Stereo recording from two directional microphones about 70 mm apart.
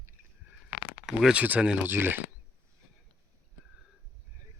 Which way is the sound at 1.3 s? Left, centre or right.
Centre.